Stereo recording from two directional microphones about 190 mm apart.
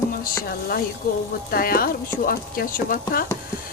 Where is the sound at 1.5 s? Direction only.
50° left (ahead or behind).